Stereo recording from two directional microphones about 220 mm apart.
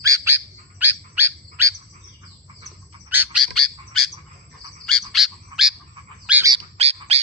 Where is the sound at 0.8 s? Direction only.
10° right (ahead or behind).